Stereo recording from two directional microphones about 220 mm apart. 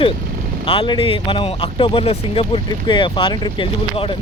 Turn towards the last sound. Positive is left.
turn(degrees=25)  # may be behind; listen again after turning